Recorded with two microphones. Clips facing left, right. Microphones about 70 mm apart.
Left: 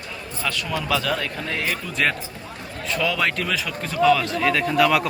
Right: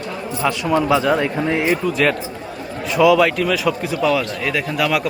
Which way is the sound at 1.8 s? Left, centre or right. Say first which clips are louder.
Right 6 dB; centre.